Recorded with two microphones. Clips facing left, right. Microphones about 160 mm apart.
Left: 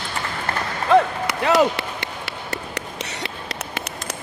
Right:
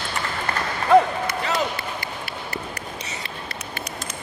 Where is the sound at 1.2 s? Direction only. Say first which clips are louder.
Left 7 dB; 75° left (ahead or behind).